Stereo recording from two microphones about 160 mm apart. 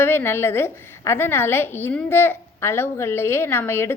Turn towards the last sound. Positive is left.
turn(degrees=15)  # may be behind; listen again after turning